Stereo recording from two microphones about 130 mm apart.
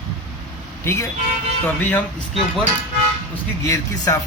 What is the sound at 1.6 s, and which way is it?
Speech, 15° left (ahead or behind).